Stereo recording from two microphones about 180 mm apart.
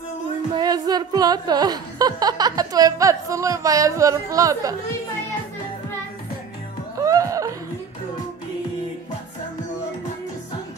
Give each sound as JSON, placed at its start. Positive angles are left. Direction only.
{"t": 0.5, "sound": "a woman's voice", "side_deg": -20}
{"t": 7.0, "sound": "laughter", "side_deg": -20}